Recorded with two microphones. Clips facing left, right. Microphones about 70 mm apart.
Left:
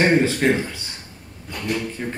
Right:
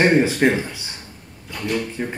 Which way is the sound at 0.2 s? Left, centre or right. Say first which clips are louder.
Right 1 dB; centre.